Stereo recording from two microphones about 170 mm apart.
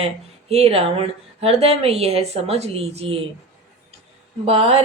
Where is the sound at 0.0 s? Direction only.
35° right (ahead or behind).